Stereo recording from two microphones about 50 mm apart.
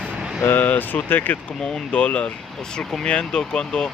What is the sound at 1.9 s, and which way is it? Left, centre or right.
Speech, left.